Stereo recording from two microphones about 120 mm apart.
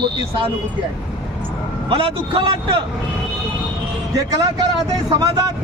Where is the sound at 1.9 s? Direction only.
45° right (ahead or behind).